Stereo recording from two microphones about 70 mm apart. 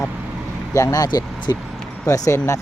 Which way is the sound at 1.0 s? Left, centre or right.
Left.